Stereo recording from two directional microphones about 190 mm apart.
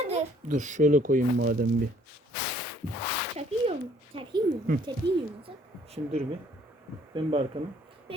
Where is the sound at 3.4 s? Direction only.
35° right (ahead or behind).